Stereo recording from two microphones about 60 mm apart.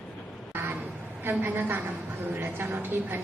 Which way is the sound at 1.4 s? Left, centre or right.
Right.